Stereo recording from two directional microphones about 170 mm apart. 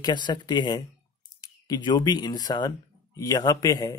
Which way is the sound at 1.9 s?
25° left (ahead or behind).